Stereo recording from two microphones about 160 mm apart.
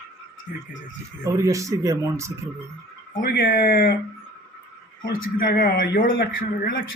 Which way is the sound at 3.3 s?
70° left (ahead or behind).